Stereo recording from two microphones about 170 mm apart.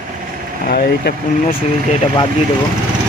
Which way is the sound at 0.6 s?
65° left (ahead or behind).